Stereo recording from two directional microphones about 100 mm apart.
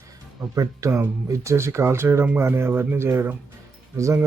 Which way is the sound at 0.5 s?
35° right (ahead or behind).